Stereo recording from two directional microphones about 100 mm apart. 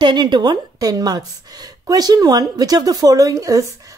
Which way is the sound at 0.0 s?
50° right (ahead or behind).